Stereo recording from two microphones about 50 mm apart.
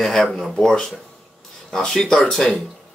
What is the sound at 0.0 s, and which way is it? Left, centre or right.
Speech, centre.